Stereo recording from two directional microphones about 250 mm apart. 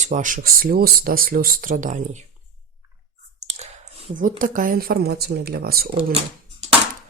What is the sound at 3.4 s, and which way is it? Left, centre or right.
Clicking, right.